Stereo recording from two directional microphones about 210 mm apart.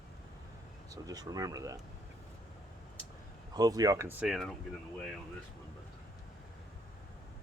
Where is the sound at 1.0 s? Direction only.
20° right (ahead or behind).